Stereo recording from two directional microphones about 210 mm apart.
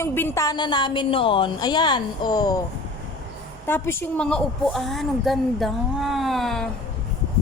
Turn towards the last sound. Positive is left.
turn(degrees=0)  # may be behind; listen again after turning